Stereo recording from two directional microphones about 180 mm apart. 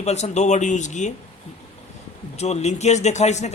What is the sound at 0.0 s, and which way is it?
A man's voice, 40° left (ahead or behind).